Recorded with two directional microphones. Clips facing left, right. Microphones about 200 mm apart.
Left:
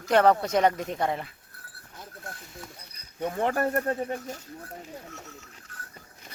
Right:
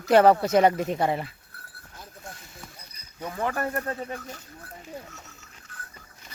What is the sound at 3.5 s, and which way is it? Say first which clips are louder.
Speech: left 3 dB; 35° left (ahead or behind).